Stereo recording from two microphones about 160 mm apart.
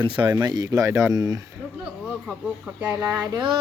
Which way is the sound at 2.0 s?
5° right (ahead or behind).